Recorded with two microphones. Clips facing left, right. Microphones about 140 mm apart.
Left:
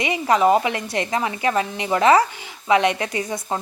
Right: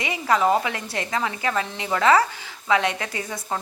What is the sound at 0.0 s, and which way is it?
Speech, 20° left (ahead or behind).